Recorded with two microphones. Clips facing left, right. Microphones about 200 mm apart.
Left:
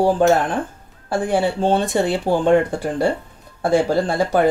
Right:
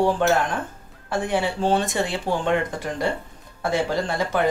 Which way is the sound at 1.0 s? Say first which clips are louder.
Left 5 dB; 30° left (ahead or behind).